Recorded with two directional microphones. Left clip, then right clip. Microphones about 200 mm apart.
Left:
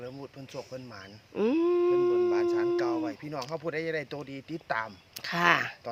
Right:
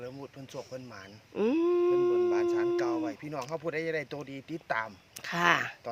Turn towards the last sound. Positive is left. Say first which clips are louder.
# left 2 dB
turn(degrees=0)  # may be behind; listen again after turning